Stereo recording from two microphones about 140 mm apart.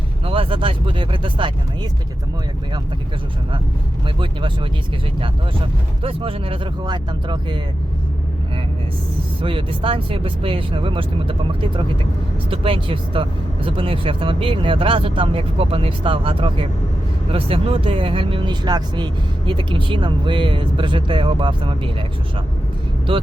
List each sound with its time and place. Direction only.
0.3 s speech: 40° right (ahead or behind)
4.2 s speech: 35° right (ahead or behind)
6.0 s speech: 40° right (ahead or behind)
9.4 s speech: 40° right (ahead or behind)